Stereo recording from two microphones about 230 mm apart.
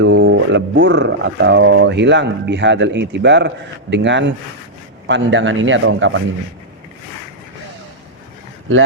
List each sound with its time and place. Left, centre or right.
0.0 s speech: right